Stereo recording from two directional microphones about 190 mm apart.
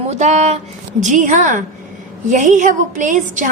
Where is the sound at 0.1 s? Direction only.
35° right (ahead or behind).